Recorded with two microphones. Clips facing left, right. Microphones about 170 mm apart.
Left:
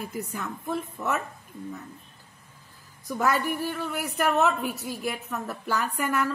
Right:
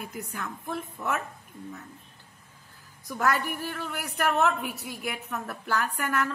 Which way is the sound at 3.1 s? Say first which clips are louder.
Left 2 dB; centre (ahead or behind).